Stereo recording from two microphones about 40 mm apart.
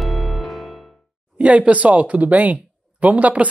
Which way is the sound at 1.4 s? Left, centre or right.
Right.